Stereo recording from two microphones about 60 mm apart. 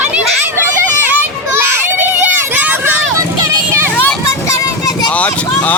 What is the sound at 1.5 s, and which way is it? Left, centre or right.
Children playing, right.